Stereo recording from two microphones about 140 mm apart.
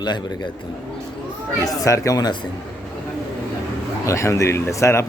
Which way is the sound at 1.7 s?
25° left (ahead or behind).